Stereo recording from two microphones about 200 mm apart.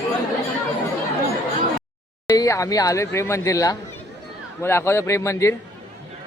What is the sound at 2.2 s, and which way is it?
Speech, 15° left (ahead or behind).